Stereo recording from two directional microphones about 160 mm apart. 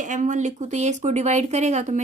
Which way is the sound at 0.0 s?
50° right (ahead or behind).